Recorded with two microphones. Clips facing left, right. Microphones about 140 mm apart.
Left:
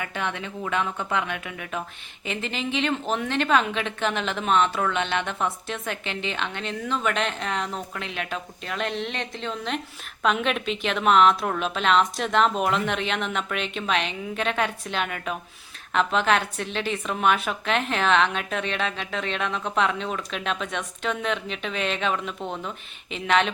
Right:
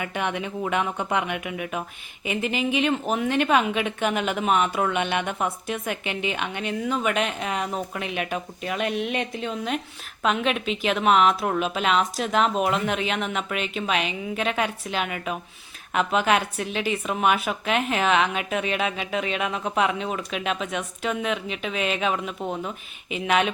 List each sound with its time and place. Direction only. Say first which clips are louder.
0.0 s a woman's voice: right 3 dB; 15° right (ahead or behind)